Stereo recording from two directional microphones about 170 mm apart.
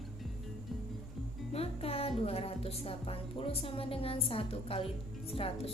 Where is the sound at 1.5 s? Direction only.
35° left (ahead or behind).